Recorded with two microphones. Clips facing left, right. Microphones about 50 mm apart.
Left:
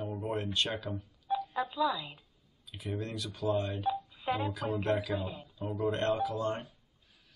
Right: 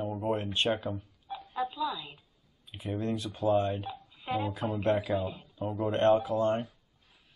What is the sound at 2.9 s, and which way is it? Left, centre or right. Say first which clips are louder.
Speech: right 6 dB; right.